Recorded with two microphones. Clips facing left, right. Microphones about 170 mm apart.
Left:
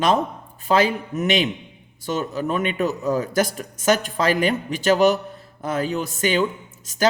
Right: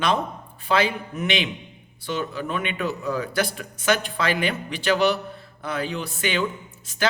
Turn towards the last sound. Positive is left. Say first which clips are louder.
# left 5 dB
turn(degrees=40)  # may be behind; listen again after turning